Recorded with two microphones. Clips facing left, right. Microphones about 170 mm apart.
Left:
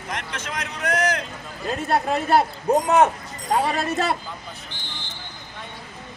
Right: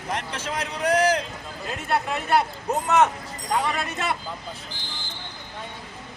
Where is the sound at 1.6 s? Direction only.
35° left (ahead or behind).